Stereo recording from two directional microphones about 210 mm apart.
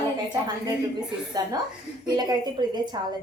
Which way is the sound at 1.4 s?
20° right (ahead or behind).